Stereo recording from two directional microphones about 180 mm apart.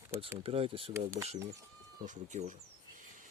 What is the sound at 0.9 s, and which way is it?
Speech, 15° right (ahead or behind).